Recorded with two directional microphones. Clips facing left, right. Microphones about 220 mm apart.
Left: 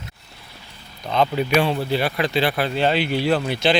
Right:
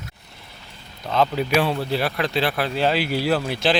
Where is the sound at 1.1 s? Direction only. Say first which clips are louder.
Left 1 dB; centre (ahead or behind).